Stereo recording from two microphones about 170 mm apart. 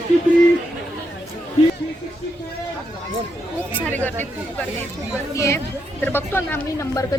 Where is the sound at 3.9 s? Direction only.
10° left (ahead or behind).